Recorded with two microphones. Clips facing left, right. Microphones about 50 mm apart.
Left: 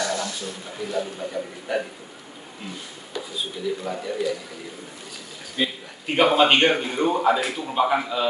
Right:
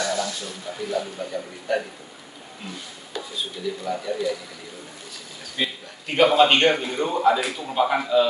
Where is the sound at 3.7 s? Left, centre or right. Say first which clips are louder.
Left 3 dB; centre.